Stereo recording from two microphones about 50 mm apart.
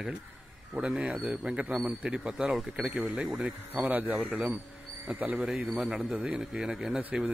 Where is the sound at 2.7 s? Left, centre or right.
Right.